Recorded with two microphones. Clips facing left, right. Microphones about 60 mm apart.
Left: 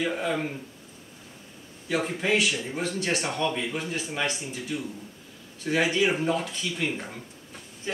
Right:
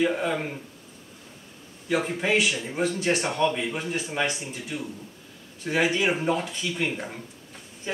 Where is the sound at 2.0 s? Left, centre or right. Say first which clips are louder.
Right 1 dB; centre.